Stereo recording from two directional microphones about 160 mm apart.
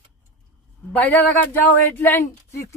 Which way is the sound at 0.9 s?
10° left (ahead or behind).